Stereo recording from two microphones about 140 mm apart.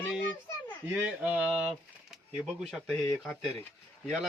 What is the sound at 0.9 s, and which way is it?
A child's voice, 10° right (ahead or behind).